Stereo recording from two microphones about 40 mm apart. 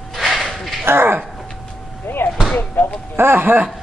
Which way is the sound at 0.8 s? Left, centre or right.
Right.